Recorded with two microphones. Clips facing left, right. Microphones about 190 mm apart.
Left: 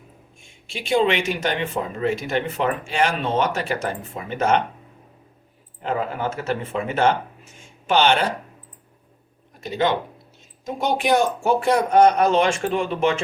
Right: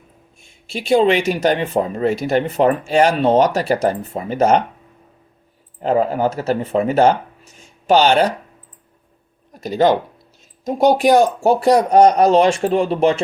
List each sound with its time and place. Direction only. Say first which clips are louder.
0.7 s speech: right 5 dB; 40° right (ahead or behind)
5.8 s speech: right 8 dB; 40° right (ahead or behind)
9.5 s speech: right 7 dB; 40° right (ahead or behind)